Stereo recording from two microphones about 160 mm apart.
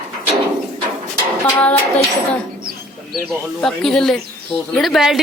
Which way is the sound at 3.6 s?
5° left (ahead or behind).